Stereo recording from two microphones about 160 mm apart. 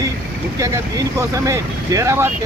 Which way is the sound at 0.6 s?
20° right (ahead or behind).